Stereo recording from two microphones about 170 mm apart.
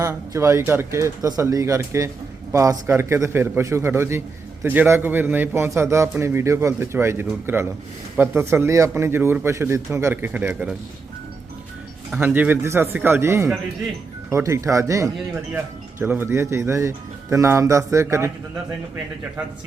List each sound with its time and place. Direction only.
0.0 s speech: 15° right (ahead or behind)
12.1 s speech: 10° right (ahead or behind)